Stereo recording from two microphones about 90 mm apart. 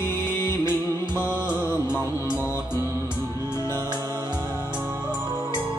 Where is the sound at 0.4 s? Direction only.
30° left (ahead or behind).